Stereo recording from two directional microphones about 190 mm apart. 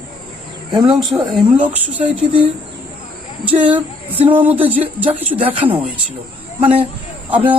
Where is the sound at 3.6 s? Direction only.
10° right (ahead or behind).